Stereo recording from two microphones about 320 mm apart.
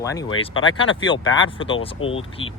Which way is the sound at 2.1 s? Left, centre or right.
Centre.